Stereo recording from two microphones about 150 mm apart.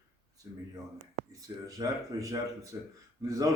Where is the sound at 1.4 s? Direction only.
25° right (ahead or behind).